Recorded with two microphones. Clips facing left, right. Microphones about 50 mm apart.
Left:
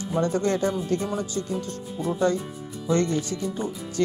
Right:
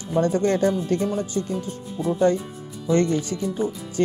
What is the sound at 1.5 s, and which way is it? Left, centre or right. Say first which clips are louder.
Speech: right 1 dB; centre.